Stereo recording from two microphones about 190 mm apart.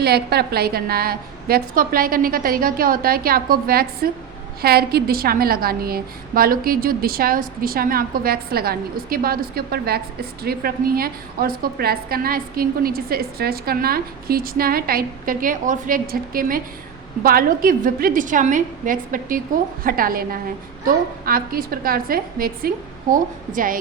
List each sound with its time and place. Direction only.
0.0 s a woman's voice: 55° right (ahead or behind)